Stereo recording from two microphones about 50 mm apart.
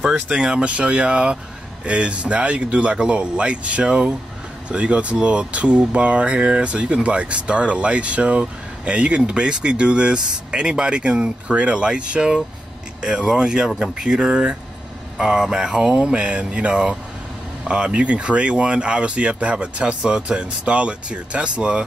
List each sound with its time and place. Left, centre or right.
0.3 s speech: centre